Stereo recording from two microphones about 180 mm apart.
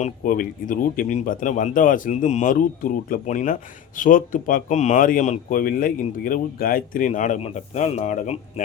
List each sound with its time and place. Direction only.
0.0 s speech: 50° left (ahead or behind)